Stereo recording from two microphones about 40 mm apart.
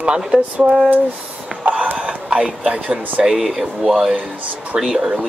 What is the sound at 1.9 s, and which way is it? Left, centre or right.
Speech, right.